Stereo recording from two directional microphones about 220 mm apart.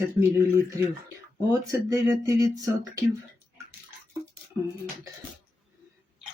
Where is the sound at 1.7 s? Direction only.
15° right (ahead or behind).